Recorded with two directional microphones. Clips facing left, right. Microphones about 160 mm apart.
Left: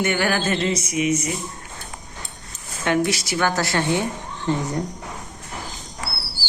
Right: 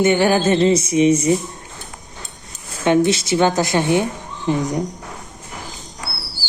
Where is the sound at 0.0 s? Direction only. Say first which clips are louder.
Right 7 dB; 20° right (ahead or behind).